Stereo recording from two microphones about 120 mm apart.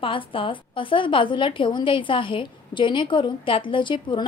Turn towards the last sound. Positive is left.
turn(degrees=40)  # may be behind; listen again after turning